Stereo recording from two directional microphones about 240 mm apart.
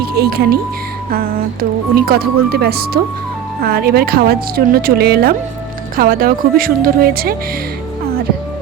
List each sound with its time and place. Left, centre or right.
0.0 s speech: right
2.0 s a woman's voice: right